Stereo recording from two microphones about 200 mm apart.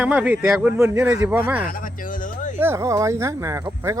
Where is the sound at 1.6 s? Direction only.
45° left (ahead or behind).